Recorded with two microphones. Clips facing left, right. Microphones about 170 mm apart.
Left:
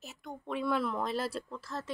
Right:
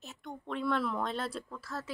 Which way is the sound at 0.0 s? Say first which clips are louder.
Even; 5° left (ahead or behind).